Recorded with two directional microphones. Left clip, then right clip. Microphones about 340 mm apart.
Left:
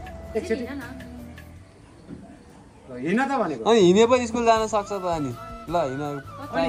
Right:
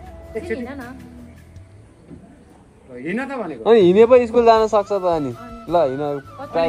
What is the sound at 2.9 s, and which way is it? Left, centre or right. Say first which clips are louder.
Speech: left 2 dB; left.